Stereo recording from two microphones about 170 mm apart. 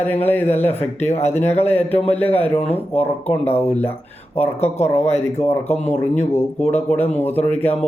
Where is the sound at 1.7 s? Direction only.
35° left (ahead or behind).